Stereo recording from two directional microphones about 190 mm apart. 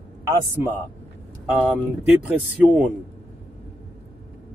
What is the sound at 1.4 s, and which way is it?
Speech, 5° right (ahead or behind).